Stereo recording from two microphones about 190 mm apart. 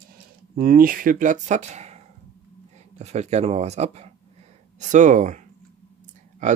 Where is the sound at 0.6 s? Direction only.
50° right (ahead or behind).